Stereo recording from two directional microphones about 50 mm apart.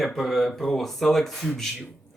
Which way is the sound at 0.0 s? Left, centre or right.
Centre.